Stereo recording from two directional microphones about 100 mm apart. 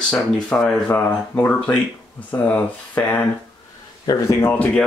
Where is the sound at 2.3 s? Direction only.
15° left (ahead or behind).